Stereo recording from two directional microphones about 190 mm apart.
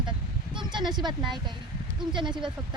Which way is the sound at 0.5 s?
25° right (ahead or behind).